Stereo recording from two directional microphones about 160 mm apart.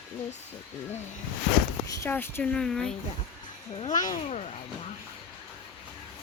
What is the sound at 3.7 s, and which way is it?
Speech, 50° left (ahead or behind).